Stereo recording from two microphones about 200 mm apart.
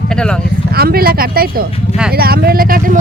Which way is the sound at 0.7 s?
50° right (ahead or behind).